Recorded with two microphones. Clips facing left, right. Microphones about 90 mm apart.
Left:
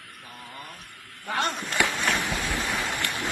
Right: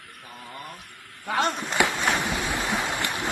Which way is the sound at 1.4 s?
20° right (ahead or behind).